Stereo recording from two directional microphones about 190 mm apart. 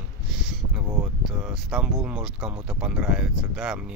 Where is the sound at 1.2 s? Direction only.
Centre (ahead or behind).